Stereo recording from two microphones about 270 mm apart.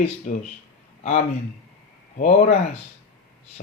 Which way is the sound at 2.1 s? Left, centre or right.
Left.